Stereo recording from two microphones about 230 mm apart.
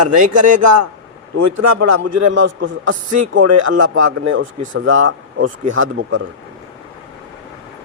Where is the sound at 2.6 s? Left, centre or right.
Right.